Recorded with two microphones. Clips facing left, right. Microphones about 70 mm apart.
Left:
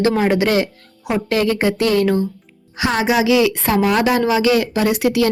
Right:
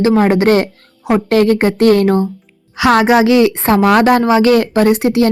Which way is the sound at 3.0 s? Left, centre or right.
Right.